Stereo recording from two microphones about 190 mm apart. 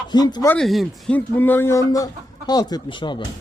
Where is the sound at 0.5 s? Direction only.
Centre (ahead or behind); by 3.2 s 25° left (ahead or behind).